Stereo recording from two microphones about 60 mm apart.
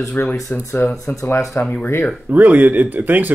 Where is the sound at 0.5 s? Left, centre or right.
Left.